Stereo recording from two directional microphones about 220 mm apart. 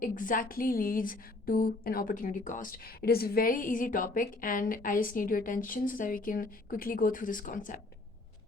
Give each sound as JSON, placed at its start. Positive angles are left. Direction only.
{"t": 0.0, "sound": "speech", "side_deg": 40}